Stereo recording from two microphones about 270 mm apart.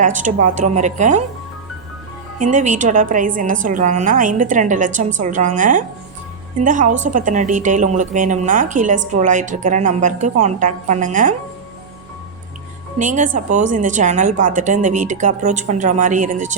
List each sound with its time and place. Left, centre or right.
0.0 s a woman's voice: right
2.5 s a woman's voice: right
13.0 s a woman's voice: right